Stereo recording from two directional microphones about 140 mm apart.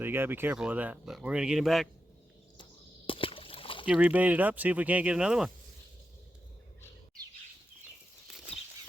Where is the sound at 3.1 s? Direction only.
40° left (ahead or behind).